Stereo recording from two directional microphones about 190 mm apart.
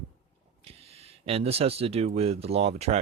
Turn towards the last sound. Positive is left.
turn(degrees=-35)  # may be behind; listen again after turning